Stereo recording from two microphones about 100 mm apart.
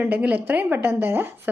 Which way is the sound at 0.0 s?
15° right (ahead or behind).